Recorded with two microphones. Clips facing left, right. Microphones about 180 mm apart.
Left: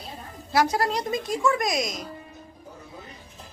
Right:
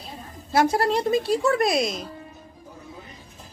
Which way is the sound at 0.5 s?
25° right (ahead or behind).